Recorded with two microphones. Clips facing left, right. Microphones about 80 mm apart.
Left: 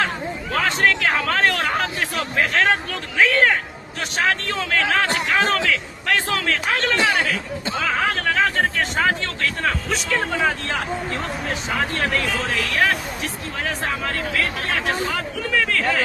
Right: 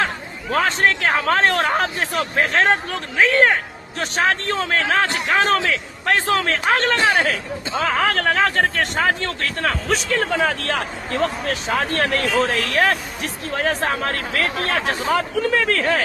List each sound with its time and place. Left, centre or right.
0.5 s speech: right
7.9 s speech: right
11.2 s speech: right